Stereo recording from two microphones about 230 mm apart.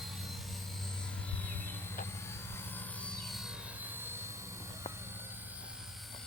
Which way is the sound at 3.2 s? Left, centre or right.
Centre.